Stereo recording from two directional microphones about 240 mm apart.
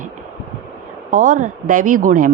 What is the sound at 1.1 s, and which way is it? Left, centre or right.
A woman's voice, right.